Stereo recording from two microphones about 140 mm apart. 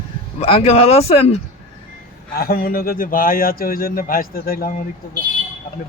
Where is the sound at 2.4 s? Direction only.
90° left.